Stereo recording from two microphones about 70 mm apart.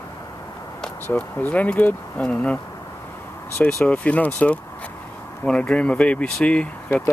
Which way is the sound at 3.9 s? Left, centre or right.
Centre.